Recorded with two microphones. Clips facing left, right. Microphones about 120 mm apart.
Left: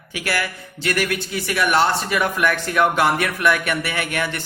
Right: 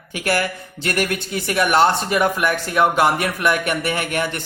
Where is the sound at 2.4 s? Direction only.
15° right (ahead or behind); by 4.4 s 35° right (ahead or behind).